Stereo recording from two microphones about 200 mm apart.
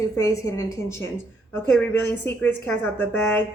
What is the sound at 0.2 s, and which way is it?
A woman's voice, 15° left (ahead or behind).